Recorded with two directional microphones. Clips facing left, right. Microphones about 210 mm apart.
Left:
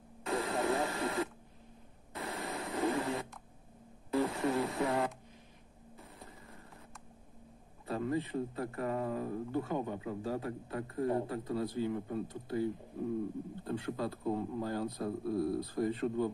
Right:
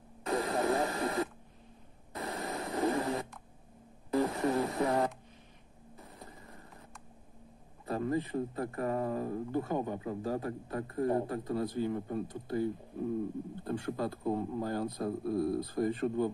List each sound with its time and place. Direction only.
0.3 s radio: 40° right (ahead or behind)
2.1 s a sound: 30° right (ahead or behind)
4.2 s radio: 40° right (ahead or behind)
7.8 s speech: 40° right (ahead or behind)
13.7 s speech: 45° right (ahead or behind)